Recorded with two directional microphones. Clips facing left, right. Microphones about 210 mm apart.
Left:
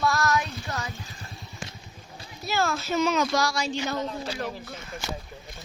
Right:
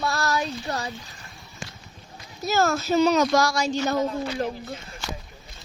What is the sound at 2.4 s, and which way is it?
Speech, 45° right (ahead or behind).